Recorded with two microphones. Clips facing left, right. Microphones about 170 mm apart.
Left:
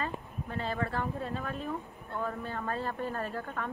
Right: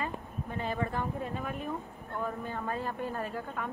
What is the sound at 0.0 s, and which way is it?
A woman's voice, 15° right (ahead or behind).